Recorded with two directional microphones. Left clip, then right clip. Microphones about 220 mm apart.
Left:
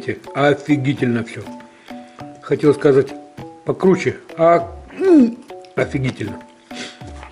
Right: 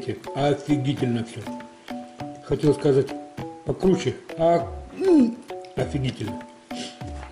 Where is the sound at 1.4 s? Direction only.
Centre (ahead or behind).